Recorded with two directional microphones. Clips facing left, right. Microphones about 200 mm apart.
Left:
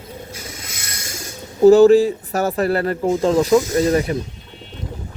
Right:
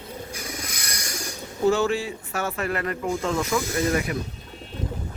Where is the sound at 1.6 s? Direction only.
40° left (ahead or behind).